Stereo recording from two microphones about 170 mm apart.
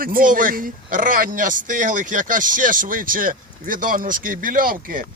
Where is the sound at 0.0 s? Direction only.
55° right (ahead or behind).